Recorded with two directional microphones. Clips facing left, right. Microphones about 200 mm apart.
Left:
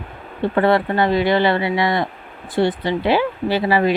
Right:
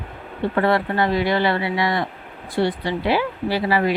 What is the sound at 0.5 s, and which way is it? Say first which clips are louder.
Speech: left 3 dB; 25° left (ahead or behind).